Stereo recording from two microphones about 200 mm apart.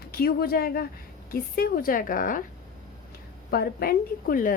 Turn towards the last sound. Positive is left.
turn(degrees=45)  # may be behind; listen again after turning